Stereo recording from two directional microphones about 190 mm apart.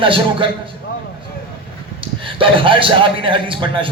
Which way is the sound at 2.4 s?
25° right (ahead or behind).